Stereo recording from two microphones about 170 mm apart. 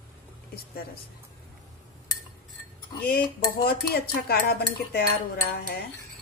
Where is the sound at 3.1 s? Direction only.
65° left (ahead or behind).